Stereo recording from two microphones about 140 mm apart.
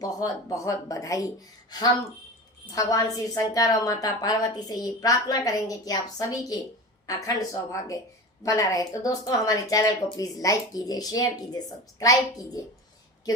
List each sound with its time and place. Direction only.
0.0 s a woman's voice: 25° left (ahead or behind)